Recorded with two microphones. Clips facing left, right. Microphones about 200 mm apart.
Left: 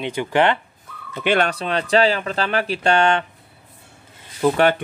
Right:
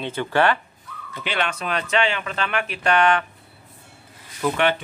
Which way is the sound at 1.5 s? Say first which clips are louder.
Left 5 dB; 30° left (ahead or behind).